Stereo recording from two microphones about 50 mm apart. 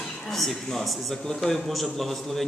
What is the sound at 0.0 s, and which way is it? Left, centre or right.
A man's voice, centre.